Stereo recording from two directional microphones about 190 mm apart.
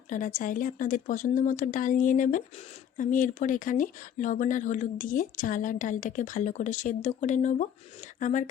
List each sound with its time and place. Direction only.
0.1 s speech: 45° left (ahead or behind)